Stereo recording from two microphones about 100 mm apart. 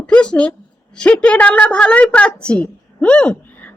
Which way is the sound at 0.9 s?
10° left (ahead or behind).